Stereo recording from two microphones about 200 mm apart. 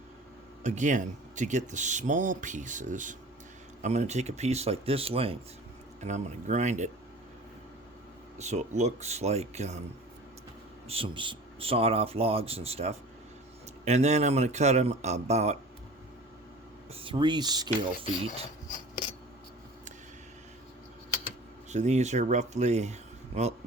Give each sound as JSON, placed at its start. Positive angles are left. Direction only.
{"t": 0.6, "sound": "speech", "side_deg": -35}
{"t": 8.4, "sound": "speech", "side_deg": -35}
{"t": 10.8, "sound": "speech", "side_deg": -25}
{"t": 16.9, "sound": "speech", "side_deg": -25}
{"t": 21.7, "sound": "speech", "side_deg": -35}